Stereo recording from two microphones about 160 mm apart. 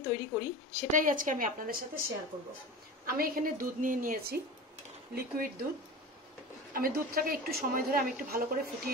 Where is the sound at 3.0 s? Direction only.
65° right (ahead or behind).